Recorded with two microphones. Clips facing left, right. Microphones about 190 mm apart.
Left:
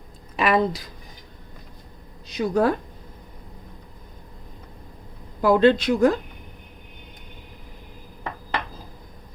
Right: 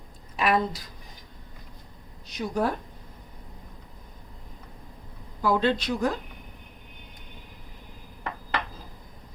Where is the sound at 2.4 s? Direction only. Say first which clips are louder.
Left 6 dB; 90° left.